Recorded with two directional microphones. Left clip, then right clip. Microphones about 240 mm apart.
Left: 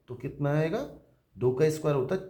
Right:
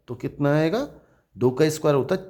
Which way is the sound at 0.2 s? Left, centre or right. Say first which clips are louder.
Right 7 dB; right.